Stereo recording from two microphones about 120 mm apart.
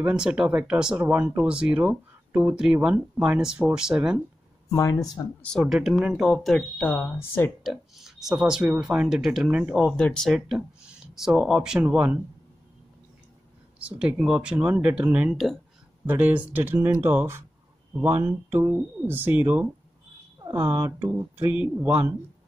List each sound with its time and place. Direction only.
0.0 s speech: 10° right (ahead or behind)
4.6 s speech: 30° left (ahead or behind)
5.6 s speech: centre (ahead or behind)
6.9 s speech: 20° left (ahead or behind)
7.6 s speech: centre (ahead or behind)
9.9 s speech: 5° left (ahead or behind); by 12.2 s 10° right (ahead or behind)
13.7 s speech: 10° right (ahead or behind)